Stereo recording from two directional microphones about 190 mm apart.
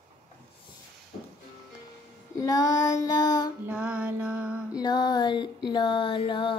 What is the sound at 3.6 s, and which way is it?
Music, 5° right (ahead or behind).